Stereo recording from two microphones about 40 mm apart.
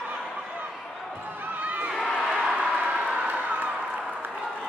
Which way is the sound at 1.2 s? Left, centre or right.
Right.